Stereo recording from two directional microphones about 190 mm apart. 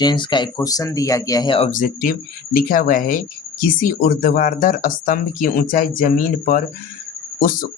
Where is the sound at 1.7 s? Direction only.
45° left (ahead or behind).